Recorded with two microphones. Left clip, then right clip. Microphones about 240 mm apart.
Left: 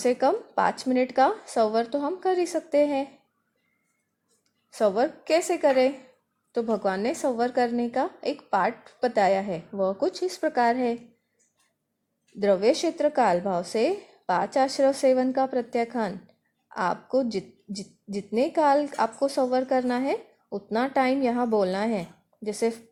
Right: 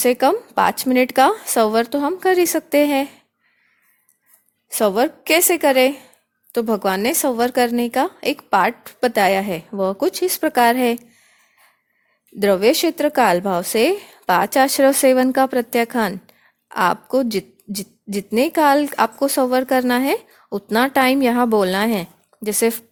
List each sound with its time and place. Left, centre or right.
0.0 s a woman's voice: right
4.7 s a woman's voice: right
12.4 s a woman's voice: right